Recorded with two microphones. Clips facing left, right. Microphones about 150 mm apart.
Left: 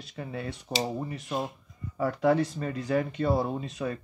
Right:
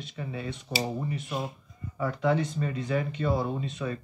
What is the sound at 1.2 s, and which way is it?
Speech, centre (ahead or behind).